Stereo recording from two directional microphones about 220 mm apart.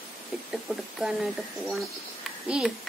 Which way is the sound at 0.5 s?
Centre (ahead or behind).